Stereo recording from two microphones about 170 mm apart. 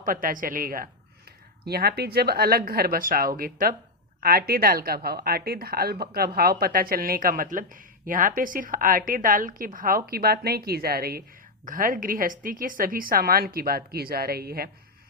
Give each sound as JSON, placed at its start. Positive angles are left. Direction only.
{"t": 0.0, "sound": "speech", "side_deg": -55}
{"t": 1.6, "sound": "speech", "side_deg": -70}